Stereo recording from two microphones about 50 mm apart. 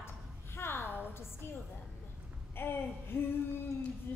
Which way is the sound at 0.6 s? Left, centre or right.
Left.